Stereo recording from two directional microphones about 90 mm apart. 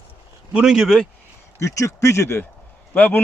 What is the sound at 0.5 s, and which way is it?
Speech, 5° right (ahead or behind).